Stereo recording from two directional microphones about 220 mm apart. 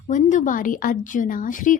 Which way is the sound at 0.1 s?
35° left (ahead or behind).